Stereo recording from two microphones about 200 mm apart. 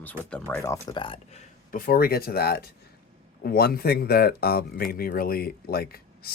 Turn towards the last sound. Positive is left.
turn(degrees=50)  # may be behind; listen again after turning